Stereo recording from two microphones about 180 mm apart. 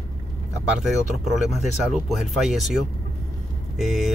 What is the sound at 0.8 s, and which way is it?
Speech, centre (ahead or behind).